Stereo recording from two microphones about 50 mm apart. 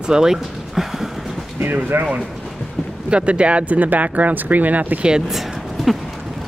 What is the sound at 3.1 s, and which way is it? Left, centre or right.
Speech, right.